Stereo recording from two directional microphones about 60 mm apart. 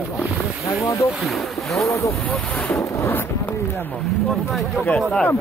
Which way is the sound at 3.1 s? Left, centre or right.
Left.